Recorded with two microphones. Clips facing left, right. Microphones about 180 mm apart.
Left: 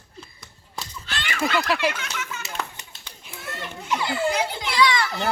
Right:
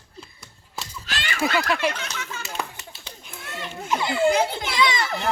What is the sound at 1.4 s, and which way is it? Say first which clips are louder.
Speech: even; centre (ahead or behind).